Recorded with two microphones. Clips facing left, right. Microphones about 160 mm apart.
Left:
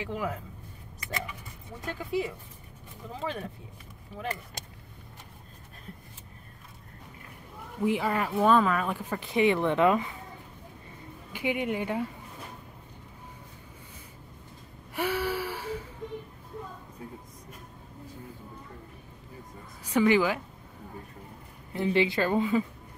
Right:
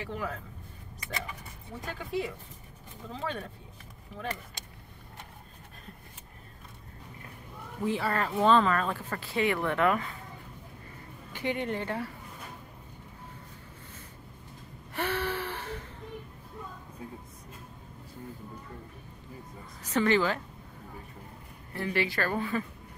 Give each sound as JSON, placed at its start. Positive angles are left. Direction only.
{"t": 0.0, "sound": "speech", "side_deg": 15}
{"t": 1.9, "sound": "speech", "side_deg": 0}
{"t": 7.8, "sound": "speech", "side_deg": 15}
{"t": 11.3, "sound": "speech", "side_deg": 10}
{"t": 15.0, "sound": "gasp", "side_deg": 10}
{"t": 19.8, "sound": "a woman's voice", "side_deg": 10}
{"t": 21.7, "sound": "a woman's voice", "side_deg": 20}